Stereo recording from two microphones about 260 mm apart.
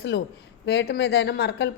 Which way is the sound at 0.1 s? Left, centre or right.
Left.